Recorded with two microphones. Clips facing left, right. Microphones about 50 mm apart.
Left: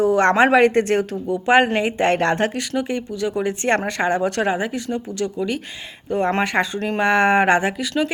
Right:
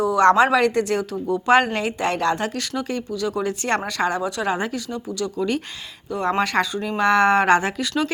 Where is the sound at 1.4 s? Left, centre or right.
Left.